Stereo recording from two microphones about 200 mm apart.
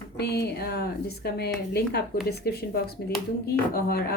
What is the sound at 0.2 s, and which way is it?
Speech, 55° left (ahead or behind).